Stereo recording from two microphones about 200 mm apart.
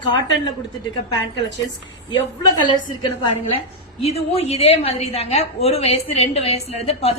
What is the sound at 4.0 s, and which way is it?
A woman's voice, 30° left (ahead or behind).